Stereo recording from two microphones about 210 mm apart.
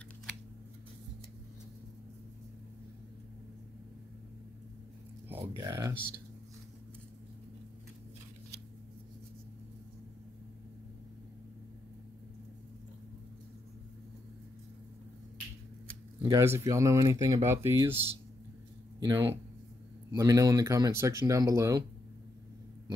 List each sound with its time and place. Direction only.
5.6 s speech: 15° right (ahead or behind)
16.2 s speech: 15° right (ahead or behind)